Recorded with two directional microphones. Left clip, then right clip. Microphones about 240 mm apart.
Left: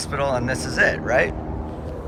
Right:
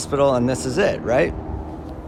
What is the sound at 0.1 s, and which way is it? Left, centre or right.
Speech, centre.